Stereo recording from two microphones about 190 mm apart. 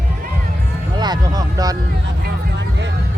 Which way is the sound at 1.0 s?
20° right (ahead or behind).